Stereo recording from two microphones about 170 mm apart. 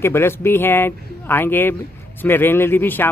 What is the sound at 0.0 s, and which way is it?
Speech, 15° left (ahead or behind).